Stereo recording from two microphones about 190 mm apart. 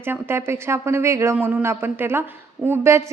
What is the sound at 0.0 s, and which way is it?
A woman's voice, 10° right (ahead or behind).